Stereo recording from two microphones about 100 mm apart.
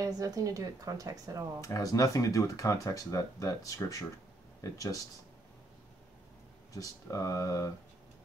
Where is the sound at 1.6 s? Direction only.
35° left (ahead or behind).